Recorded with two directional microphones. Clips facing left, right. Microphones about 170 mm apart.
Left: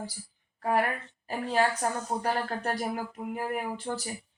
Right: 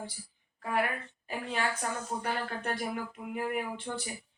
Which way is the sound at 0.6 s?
40° left (ahead or behind).